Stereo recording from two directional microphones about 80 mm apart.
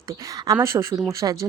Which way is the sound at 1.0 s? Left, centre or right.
Right.